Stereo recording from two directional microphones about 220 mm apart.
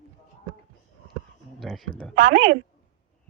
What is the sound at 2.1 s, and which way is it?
Speech, 40° right (ahead or behind).